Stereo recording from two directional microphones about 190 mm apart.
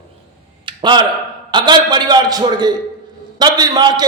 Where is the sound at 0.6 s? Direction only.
25° right (ahead or behind).